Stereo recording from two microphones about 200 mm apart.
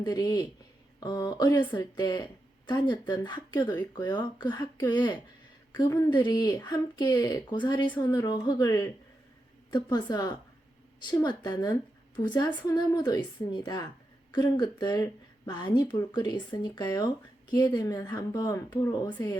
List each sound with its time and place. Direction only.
0.0 s speech: 20° left (ahead or behind)